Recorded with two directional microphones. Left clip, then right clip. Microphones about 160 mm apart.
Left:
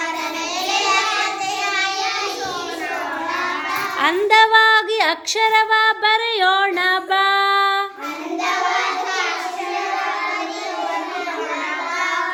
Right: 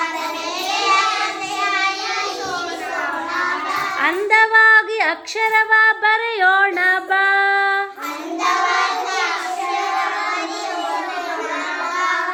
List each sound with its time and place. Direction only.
4.0 s female singing: 25° left (ahead or behind)